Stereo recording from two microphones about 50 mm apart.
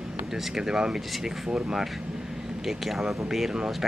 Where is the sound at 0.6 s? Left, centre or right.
Centre.